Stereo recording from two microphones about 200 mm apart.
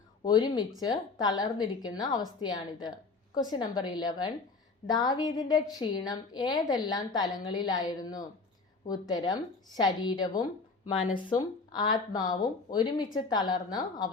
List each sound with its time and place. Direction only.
0.3 s a woman's voice: 20° left (ahead or behind)